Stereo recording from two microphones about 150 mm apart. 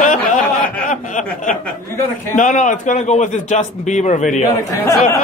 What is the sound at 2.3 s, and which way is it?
A man's voice, 55° left (ahead or behind).